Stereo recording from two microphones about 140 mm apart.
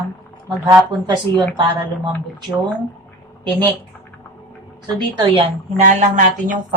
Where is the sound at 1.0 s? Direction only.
30° right (ahead or behind).